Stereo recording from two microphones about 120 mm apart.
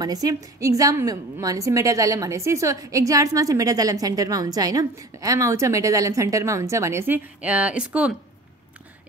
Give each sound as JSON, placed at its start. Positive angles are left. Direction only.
{"t": 0.0, "sound": "a woman's voice", "side_deg": -30}